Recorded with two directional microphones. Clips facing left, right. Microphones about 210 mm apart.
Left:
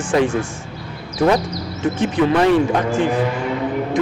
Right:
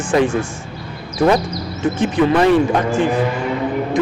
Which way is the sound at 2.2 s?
15° right (ahead or behind).